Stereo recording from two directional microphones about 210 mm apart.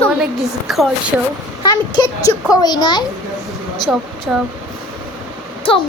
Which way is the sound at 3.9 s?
5° right (ahead or behind).